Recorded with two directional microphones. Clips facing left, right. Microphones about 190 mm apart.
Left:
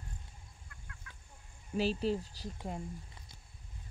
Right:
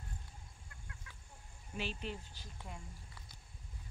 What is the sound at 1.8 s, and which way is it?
Speech, 35° left (ahead or behind).